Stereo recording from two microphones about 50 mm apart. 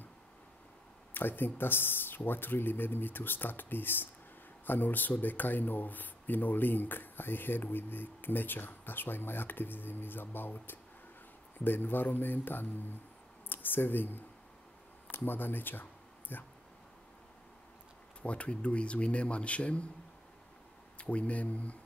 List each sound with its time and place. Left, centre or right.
1.1 s speech: left
18.2 s speech: left
21.0 s speech: left